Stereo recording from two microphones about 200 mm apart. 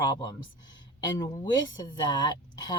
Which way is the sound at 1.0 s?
20° left (ahead or behind).